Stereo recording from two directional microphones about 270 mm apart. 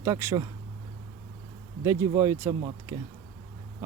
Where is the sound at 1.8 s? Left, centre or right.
Centre.